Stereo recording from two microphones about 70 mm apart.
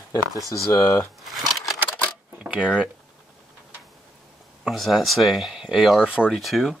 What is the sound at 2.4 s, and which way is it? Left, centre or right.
Tick-tock, centre.